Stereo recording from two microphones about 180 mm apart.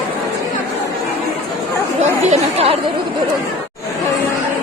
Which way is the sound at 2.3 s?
35° right (ahead or behind).